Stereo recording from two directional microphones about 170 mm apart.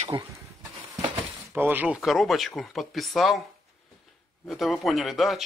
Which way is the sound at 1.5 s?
10° right (ahead or behind).